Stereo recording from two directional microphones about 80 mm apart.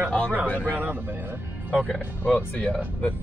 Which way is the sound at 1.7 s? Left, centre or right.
Centre.